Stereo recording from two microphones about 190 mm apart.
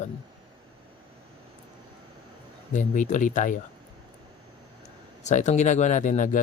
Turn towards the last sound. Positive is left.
turn(degrees=40)  # may be behind; listen again after turning